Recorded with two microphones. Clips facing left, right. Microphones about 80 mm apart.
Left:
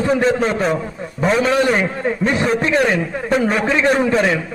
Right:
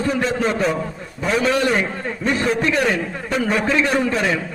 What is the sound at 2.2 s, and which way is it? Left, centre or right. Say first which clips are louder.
A man's voice: left 1 dB; left.